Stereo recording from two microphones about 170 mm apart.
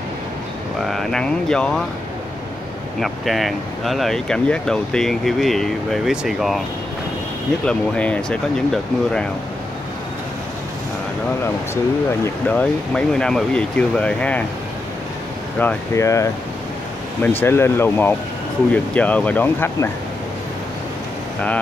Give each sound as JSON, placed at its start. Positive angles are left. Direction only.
{"t": 0.8, "sound": "speech", "side_deg": 0}
{"t": 3.0, "sound": "speech", "side_deg": 0}
{"t": 7.6, "sound": "speech", "side_deg": 5}
{"t": 12.4, "sound": "speech", "side_deg": 5}
{"t": 15.6, "sound": "speech", "side_deg": 15}
{"t": 17.4, "sound": "speech", "side_deg": 15}